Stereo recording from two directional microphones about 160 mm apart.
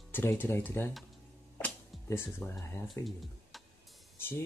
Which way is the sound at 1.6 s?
15° left (ahead or behind).